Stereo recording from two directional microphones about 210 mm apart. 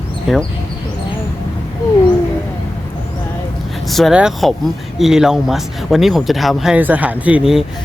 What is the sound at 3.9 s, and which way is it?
Speech, centre (ahead or behind).